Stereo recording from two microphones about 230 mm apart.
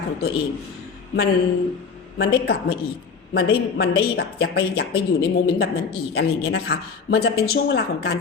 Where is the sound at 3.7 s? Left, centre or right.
Left.